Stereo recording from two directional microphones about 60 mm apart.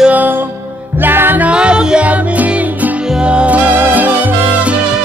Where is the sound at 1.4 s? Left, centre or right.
Centre.